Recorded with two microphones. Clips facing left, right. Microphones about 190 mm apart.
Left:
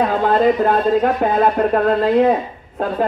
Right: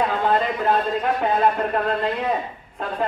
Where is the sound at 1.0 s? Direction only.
45° left (ahead or behind).